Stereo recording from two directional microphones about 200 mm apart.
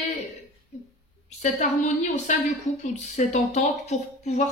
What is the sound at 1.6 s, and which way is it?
Speech, 35° left (ahead or behind).